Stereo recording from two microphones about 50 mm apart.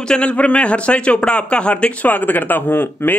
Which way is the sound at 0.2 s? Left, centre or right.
Left.